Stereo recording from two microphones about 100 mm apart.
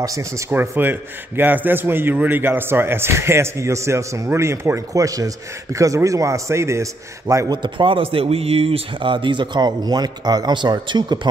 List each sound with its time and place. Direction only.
0.0 s speech: 30° right (ahead or behind)
0.5 s a man's voice: 20° right (ahead or behind)
7.5 s speech: 50° right (ahead or behind)